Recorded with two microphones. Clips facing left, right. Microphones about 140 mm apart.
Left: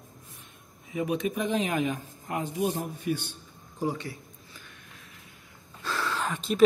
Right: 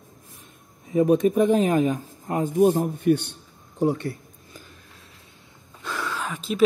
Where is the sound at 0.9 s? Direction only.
45° right (ahead or behind).